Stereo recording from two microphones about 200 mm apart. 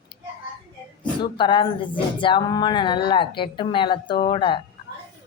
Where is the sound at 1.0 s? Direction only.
25° left (ahead or behind).